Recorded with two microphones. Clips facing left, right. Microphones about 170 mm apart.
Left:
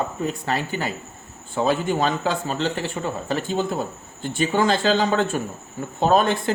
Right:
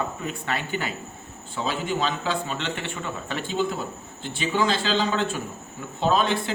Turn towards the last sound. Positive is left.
turn(degrees=50)  # may be behind; listen again after turning